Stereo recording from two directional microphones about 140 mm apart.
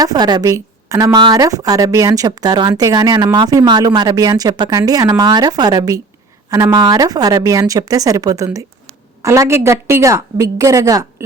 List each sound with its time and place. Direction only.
0.0 s a woman's voice: 30° right (ahead or behind)